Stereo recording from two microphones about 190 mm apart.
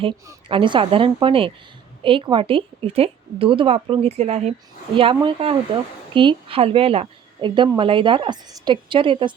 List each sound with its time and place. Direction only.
0.4 s a woman's voice: 25° right (ahead or behind)